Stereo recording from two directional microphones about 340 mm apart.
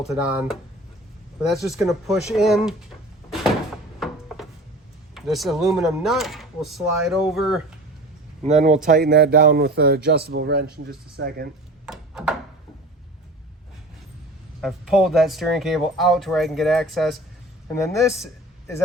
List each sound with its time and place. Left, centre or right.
0.0 s speech: centre
1.6 s speech: centre
5.1 s speech: centre
8.4 s a man's voice: centre
11.9 s a sound: centre
14.6 s speech: centre